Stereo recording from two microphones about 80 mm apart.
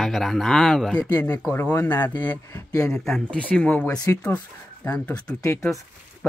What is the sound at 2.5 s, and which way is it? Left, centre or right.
Speech, left.